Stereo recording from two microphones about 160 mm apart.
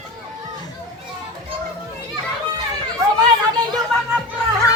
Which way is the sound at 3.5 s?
25° right (ahead or behind).